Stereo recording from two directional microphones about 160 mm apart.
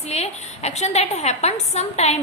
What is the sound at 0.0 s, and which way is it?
A woman's voice, 45° left (ahead or behind).